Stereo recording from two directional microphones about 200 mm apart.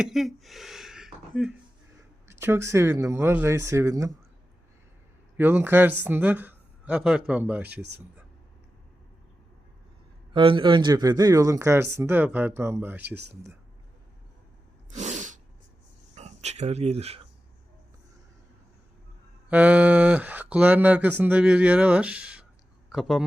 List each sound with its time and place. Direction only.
0.0 s a sound: centre (ahead or behind)
2.2 s speech: 10° right (ahead or behind)
5.4 s speech: 10° right (ahead or behind)
7.8 s speech: 55° right (ahead or behind)
10.3 s speech: 25° right (ahead or behind); by 13.1 s 10° right (ahead or behind)
14.9 s sneeze: 35° right (ahead or behind)
16.1 s speech: 35° right (ahead or behind)
19.5 s speech: 5° right (ahead or behind)